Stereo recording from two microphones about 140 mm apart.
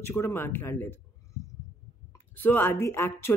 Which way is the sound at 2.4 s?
15° left (ahead or behind).